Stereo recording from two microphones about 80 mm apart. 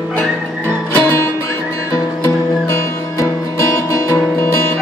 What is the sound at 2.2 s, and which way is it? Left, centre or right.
Music, left.